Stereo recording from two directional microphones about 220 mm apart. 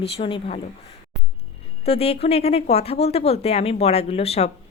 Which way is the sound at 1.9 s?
25° left (ahead or behind).